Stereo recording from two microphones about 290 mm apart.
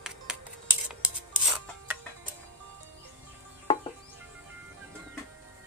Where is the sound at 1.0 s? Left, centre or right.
Centre.